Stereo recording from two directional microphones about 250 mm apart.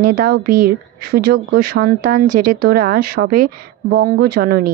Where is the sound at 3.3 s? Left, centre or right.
Right.